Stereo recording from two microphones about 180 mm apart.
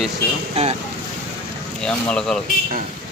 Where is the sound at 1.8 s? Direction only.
5° left (ahead or behind).